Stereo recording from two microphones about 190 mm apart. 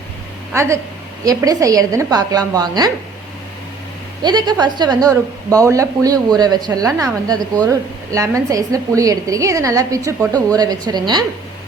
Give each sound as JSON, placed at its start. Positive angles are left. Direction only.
{"t": 0.5, "sound": "a woman's voice", "side_deg": -15}
{"t": 4.2, "sound": "a woman's voice", "side_deg": -20}